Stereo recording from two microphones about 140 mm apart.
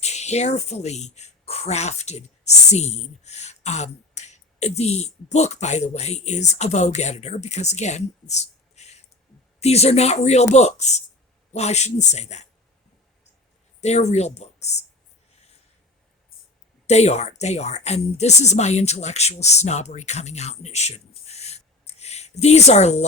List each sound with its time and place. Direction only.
0.0 s speech: 50° left (ahead or behind)
13.8 s speech: 55° left (ahead or behind)
16.8 s speech: 50° left (ahead or behind)